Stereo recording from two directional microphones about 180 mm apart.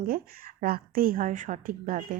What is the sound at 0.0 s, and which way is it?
Speech, 55° right (ahead or behind).